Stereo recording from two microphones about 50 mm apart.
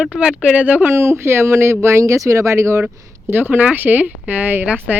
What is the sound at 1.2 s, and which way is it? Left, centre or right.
Speech, right.